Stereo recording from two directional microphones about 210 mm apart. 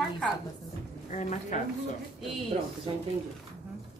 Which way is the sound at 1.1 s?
35° left (ahead or behind).